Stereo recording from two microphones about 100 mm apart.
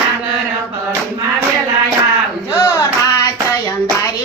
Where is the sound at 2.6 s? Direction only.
40° left (ahead or behind).